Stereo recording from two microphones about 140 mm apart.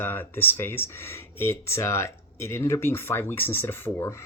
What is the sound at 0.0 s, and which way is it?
Speech, 15° left (ahead or behind).